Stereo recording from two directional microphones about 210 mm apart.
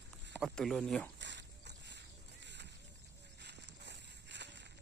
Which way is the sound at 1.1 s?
55° right (ahead or behind).